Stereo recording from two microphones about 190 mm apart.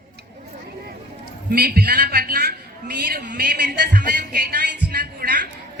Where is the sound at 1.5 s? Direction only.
55° right (ahead or behind).